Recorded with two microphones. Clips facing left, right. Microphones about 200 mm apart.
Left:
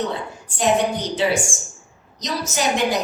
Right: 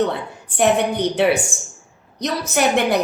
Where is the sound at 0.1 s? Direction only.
60° right (ahead or behind).